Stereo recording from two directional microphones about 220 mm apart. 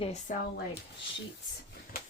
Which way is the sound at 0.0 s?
30° left (ahead or behind).